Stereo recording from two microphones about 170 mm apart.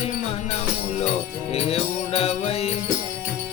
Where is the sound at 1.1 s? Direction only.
35° left (ahead or behind).